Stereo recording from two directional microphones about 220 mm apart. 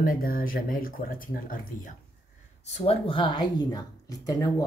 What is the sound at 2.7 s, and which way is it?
Speech, 25° left (ahead or behind).